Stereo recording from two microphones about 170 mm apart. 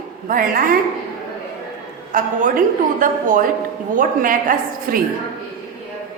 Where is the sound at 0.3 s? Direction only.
55° right (ahead or behind).